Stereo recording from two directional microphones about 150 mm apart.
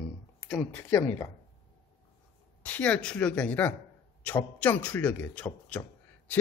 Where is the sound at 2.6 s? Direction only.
10° left (ahead or behind).